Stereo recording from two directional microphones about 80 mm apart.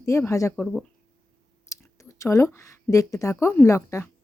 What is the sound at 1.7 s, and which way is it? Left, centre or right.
A woman's voice, left.